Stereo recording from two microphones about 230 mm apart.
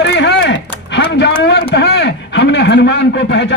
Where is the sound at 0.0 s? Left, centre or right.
Left.